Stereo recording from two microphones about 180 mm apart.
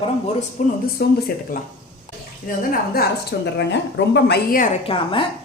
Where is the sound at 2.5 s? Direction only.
60° left (ahead or behind).